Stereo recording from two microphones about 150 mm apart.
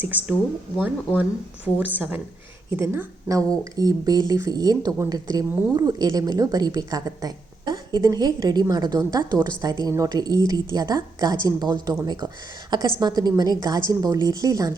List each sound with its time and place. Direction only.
0.0 s a woman's voice: 10° right (ahead or behind)
5.5 s speech: 10° right (ahead or behind)
5.7 s a woman's voice: 25° right (ahead or behind)